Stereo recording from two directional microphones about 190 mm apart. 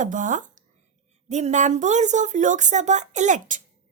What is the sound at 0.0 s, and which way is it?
A woman's voice, 40° right (ahead or behind).